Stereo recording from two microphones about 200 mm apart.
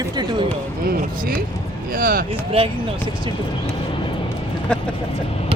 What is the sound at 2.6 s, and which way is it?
Speech, 30° right (ahead or behind).